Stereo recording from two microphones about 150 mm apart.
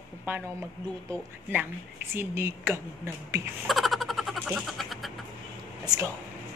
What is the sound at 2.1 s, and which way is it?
Speech, 15° right (ahead or behind).